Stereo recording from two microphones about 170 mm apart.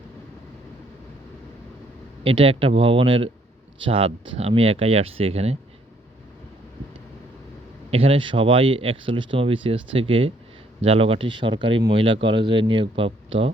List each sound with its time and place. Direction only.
2.2 s speech: 35° right (ahead or behind)
7.9 s speech: 35° right (ahead or behind)